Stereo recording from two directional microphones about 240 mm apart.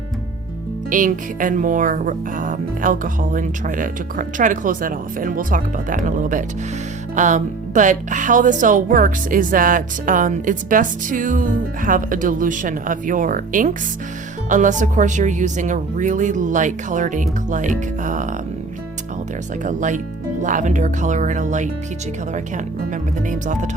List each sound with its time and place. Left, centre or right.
0.9 s speech: right
19.6 s speech: right
23.3 s speech: right